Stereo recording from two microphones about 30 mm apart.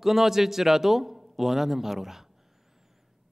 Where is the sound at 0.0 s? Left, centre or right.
Centre.